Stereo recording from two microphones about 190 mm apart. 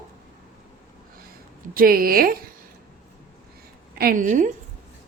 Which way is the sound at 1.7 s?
50° right (ahead or behind).